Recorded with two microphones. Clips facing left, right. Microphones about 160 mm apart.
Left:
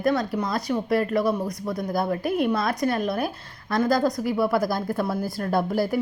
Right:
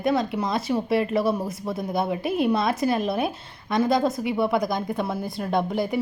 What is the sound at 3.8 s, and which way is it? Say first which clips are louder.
Speech: left 1 dB; centre (ahead or behind).